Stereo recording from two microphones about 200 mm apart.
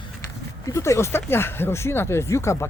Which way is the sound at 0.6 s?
15° left (ahead or behind).